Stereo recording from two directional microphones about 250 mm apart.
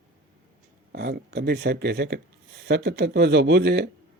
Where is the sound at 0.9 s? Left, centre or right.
Right.